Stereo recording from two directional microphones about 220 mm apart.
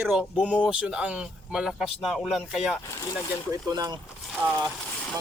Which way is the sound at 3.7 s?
20° right (ahead or behind).